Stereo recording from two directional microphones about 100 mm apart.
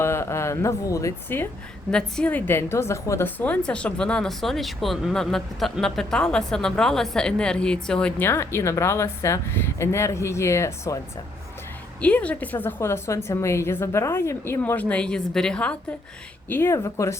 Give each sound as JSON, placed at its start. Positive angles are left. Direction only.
{"t": 0.0, "sound": "speech", "side_deg": 25}
{"t": 1.9, "sound": "speech", "side_deg": 10}
{"t": 2.5, "sound": "speech", "side_deg": 25}
{"t": 3.2, "sound": "speech", "side_deg": 15}
{"t": 8.2, "sound": "speech", "side_deg": 25}
{"t": 12.0, "sound": "speech", "side_deg": 15}
{"t": 14.6, "sound": "speech", "side_deg": 15}
{"t": 16.5, "sound": "speech", "side_deg": 25}